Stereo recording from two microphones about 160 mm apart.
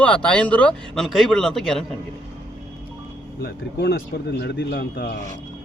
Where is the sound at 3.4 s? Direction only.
85° left.